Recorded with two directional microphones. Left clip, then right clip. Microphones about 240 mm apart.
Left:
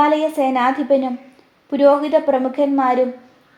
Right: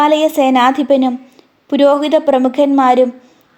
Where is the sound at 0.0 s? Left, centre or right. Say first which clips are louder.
Right 5 dB; right.